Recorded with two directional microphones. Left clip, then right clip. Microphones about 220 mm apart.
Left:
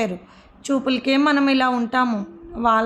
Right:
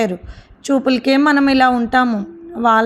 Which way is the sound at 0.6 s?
20° right (ahead or behind).